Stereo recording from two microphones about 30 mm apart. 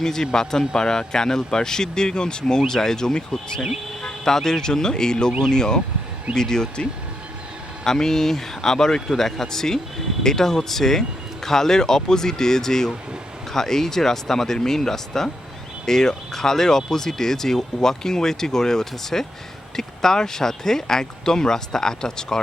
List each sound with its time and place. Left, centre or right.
0.0 s speech: centre
7.9 s speech: centre